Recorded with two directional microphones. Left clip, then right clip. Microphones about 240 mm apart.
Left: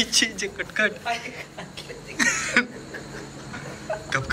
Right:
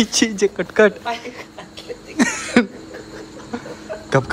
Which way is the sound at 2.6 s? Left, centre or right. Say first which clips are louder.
Right 6 dB; centre.